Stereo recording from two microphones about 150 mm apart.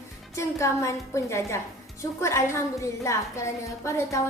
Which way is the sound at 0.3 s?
20° left (ahead or behind).